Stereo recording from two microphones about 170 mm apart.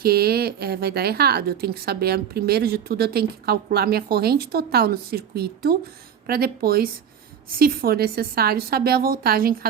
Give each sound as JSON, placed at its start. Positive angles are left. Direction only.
{"t": 0.0, "sound": "a woman's voice", "side_deg": -65}